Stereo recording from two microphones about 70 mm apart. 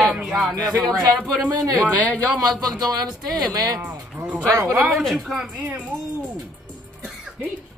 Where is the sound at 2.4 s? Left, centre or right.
Right.